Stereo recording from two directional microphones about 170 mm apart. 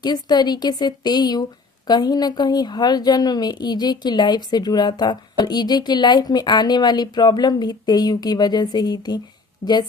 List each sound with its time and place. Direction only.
0.0 s a woman's voice: 25° left (ahead or behind)